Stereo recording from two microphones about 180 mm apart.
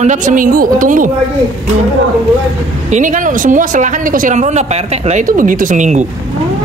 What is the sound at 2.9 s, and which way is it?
Speech, 45° right (ahead or behind).